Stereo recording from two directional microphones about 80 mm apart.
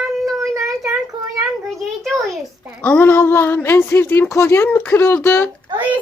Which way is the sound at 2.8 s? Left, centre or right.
Left.